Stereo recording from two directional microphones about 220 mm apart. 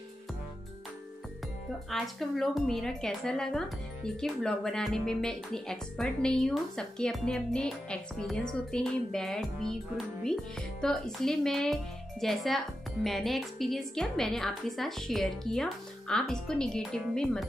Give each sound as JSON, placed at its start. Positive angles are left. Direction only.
{"t": 1.9, "sound": "speech", "side_deg": 0}